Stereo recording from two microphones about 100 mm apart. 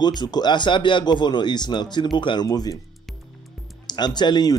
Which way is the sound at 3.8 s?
45° left (ahead or behind).